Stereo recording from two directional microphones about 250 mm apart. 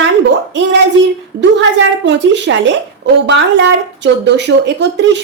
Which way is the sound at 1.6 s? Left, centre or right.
Right.